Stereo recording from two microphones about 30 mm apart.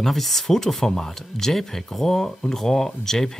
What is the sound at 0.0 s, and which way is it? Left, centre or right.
Speech, centre.